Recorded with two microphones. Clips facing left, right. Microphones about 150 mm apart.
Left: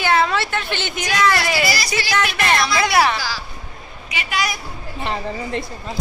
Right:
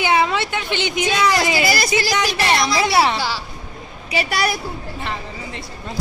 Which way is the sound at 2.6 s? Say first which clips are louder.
Even; 30° right (ahead or behind).